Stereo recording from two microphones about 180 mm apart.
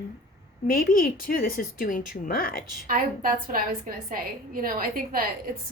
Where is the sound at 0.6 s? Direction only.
50° left (ahead or behind).